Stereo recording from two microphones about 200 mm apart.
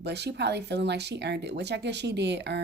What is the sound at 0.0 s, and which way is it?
Speech, 55° right (ahead or behind).